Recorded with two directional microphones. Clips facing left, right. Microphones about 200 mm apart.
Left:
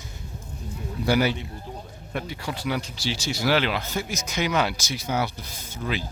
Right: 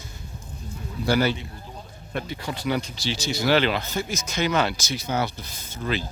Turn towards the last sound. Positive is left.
turn(degrees=10)  # may be behind; listen again after turning